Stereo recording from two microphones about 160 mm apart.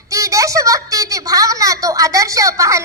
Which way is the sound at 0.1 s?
20° right (ahead or behind).